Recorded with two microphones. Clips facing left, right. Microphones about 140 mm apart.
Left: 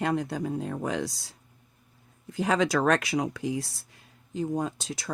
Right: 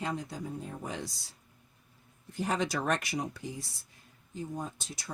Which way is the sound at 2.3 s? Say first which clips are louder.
Left 7 dB; 90° left.